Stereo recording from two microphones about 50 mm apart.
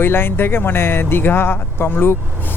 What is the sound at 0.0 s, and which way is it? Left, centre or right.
Speech, left.